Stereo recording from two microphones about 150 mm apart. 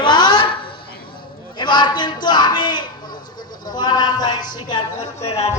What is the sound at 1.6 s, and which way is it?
Speech, 30° left (ahead or behind).